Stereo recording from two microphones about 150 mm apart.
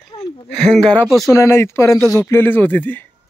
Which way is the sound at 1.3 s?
20° left (ahead or behind).